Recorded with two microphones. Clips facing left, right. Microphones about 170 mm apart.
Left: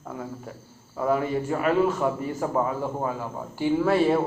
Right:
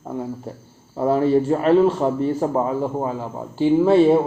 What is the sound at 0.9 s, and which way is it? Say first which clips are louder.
A man's voice: right 7 dB; 30° right (ahead or behind).